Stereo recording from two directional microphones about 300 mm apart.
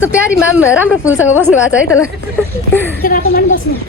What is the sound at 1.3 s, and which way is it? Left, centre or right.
Speech, centre.